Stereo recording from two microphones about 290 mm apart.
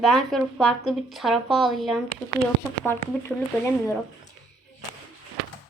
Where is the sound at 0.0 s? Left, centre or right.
Centre.